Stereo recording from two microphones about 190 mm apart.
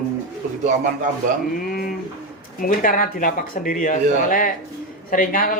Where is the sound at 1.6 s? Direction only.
50° left (ahead or behind).